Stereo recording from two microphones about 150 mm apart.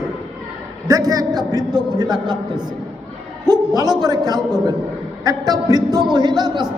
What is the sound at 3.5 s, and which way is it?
A man's voice, 25° right (ahead or behind).